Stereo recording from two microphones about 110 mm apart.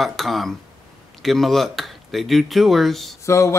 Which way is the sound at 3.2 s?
25° left (ahead or behind).